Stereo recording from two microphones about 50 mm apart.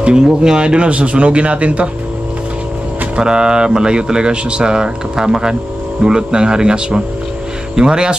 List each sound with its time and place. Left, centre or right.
0.0 s speech: centre
3.2 s speech: centre